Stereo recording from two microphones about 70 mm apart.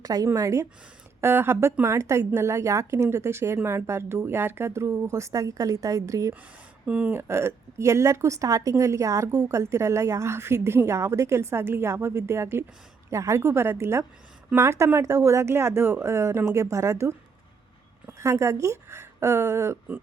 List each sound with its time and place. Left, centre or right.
0.0 s speech: right
0.3 s a woman's voice: right
1.2 s a woman's voice: right
6.8 s speech: centre
7.1 s a woman's voice: right
18.2 s a woman's voice: right